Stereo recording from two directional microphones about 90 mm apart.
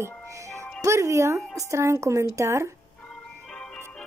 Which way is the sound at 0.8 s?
35° right (ahead or behind).